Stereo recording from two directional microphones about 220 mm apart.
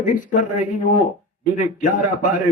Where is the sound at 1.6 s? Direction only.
35° left (ahead or behind).